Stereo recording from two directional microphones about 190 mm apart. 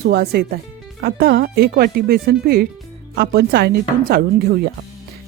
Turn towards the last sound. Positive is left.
turn(degrees=-55)  # may be behind; listen again after turning